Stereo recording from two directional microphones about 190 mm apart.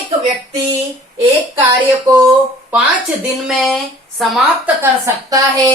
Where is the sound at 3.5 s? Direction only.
Centre (ahead or behind).